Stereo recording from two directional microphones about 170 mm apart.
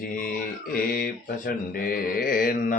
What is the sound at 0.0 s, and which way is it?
Speech, 60° left (ahead or behind).